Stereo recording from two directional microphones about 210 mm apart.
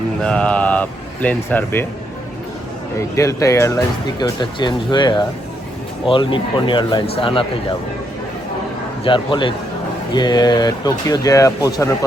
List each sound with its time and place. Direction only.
0.2 s speech: 5° left (ahead or behind)
3.0 s speech: 15° left (ahead or behind)
9.0 s speech: 25° left (ahead or behind)